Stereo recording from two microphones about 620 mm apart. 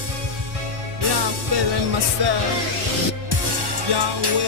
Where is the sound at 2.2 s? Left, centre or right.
Right.